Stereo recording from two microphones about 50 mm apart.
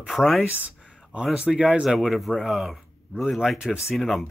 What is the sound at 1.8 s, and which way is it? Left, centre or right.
Speech, centre.